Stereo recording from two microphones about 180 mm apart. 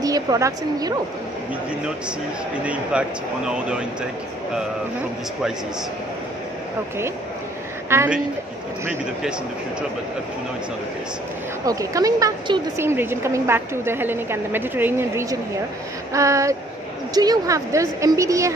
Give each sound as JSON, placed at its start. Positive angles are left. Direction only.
{"t": 0.0, "sound": "a woman's voice", "side_deg": -20}
{"t": 2.6, "sound": "speech", "side_deg": -5}
{"t": 7.9, "sound": "a woman's voice", "side_deg": -15}
{"t": 11.6, "sound": "a woman's voice", "side_deg": -20}